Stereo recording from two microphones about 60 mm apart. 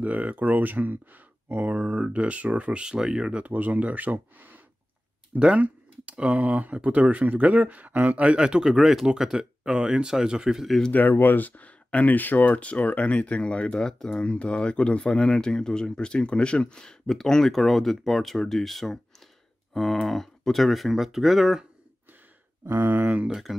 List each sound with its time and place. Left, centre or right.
0.0 s speech: right
8.2 s speech: centre
10.9 s speech: left; by 21.6 s centre
22.7 s speech: right
23.2 s speech: centre